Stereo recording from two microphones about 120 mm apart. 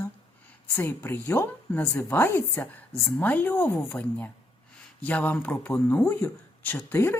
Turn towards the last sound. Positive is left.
turn(degrees=20)  # may be behind; listen again after turning